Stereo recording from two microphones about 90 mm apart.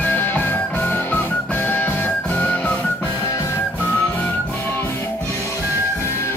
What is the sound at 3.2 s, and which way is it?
Music, 30° left (ahead or behind).